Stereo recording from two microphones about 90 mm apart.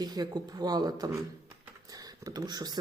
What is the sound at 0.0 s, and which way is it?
Speech, 50° right (ahead or behind).